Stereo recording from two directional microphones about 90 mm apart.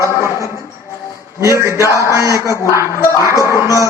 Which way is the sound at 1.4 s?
35° right (ahead or behind).